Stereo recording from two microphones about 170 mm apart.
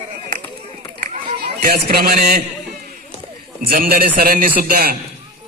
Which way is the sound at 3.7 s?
55° right (ahead or behind).